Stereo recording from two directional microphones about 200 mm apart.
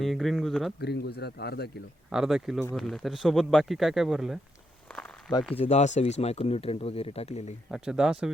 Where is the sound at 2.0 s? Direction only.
5° right (ahead or behind).